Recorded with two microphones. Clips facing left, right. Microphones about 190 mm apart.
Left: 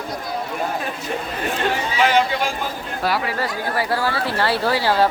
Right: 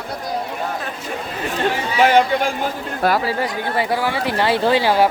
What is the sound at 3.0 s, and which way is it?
Speech, 50° right (ahead or behind).